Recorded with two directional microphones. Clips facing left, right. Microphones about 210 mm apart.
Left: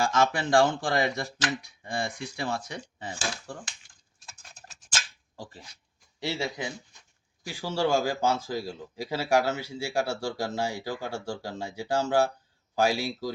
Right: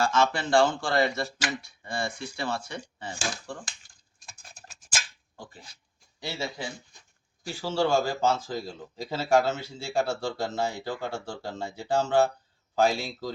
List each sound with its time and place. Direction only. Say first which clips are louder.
0.0 s speech: even; 15° left (ahead or behind)
4.3 s a sound: right 1 dB; 10° right (ahead or behind)
6.1 s speech: left 3 dB; 15° left (ahead or behind)